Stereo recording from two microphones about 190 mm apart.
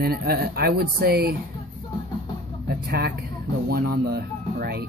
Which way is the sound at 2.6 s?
55° right (ahead or behind).